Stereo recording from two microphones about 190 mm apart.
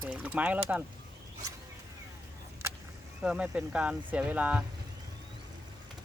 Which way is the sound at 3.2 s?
5° right (ahead or behind).